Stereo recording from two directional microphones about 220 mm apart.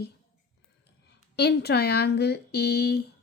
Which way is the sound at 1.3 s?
50° left (ahead or behind).